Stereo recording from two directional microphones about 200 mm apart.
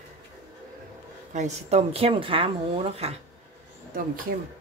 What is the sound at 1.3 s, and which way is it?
A woman's voice, 35° right (ahead or behind).